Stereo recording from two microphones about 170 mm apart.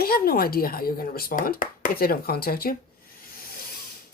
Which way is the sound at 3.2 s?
60° left (ahead or behind).